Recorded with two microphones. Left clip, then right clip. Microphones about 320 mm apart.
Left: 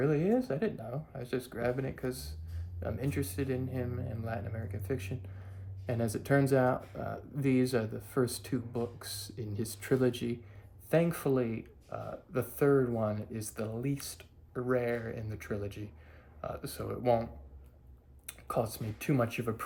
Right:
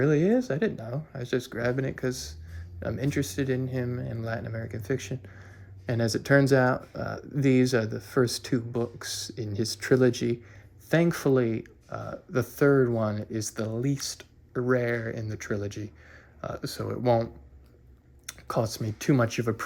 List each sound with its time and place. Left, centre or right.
0.0 s speech: centre
18.3 s speech: centre